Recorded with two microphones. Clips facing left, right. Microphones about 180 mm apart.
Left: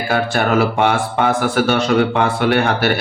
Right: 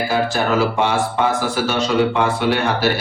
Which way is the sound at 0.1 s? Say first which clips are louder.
Left 4 dB; 60° left (ahead or behind).